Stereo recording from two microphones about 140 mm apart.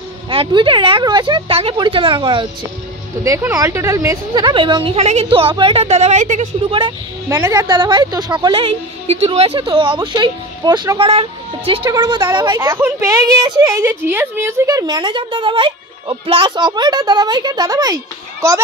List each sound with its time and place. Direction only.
0.3 s a woman's voice: 35° right (ahead or behind)
3.3 s a woman's voice: 20° right (ahead or behind)
4.3 s a woman's voice: 30° right (ahead or behind); by 6.5 s 60° right (ahead or behind)
7.2 s a woman's voice: 15° right (ahead or behind)
11.1 s a woman's voice: 40° right (ahead or behind)
11.8 s a woman's voice: 30° right (ahead or behind)
12.5 s a woman's voice: 20° right (ahead or behind)